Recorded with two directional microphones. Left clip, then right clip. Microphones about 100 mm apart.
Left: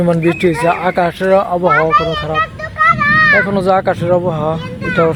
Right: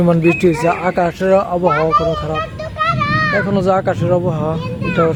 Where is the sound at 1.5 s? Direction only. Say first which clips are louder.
Left 3 dB; 30° left (ahead or behind).